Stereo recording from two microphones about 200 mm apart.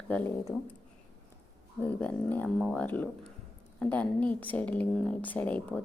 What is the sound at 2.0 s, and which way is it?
A woman's voice, 10° left (ahead or behind).